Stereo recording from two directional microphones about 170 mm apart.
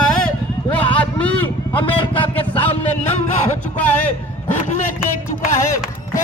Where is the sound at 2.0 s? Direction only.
30° left (ahead or behind).